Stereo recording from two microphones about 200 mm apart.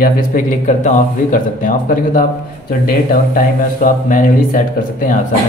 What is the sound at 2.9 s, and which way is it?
A man's voice, 45° left (ahead or behind).